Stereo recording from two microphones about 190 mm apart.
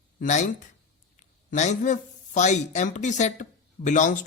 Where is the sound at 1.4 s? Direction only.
40° left (ahead or behind).